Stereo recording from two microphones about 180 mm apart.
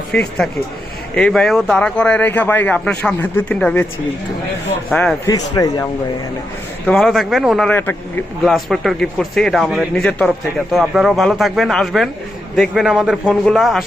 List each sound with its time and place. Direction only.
0.1 s speech: 5° left (ahead or behind)
4.9 s speech: centre (ahead or behind)
5.2 s speech: 20° left (ahead or behind)
6.8 s speech: centre (ahead or behind)
7.7 s speech: 10° left (ahead or behind)
8.4 s speech: centre (ahead or behind)